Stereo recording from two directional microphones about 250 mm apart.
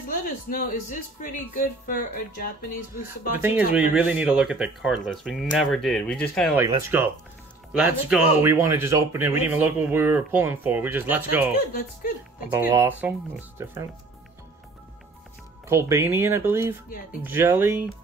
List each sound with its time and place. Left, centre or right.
0.5 s speech: left
3.3 s speech: centre
6.6 s speech: centre
11.7 s speech: left
12.5 s speech: centre
15.7 s speech: centre